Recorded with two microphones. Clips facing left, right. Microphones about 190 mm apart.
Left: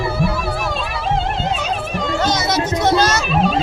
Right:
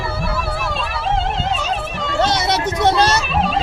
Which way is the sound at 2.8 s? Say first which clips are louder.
Right 1 dB; 30° right (ahead or behind).